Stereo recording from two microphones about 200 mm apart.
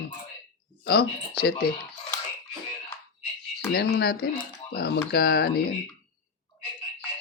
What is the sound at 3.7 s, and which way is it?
Speech, 50° left (ahead or behind).